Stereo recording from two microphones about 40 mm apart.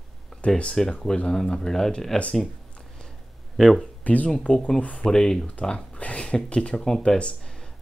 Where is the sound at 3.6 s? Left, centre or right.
Centre.